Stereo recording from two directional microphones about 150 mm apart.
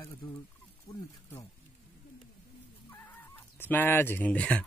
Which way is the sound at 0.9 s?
20° left (ahead or behind).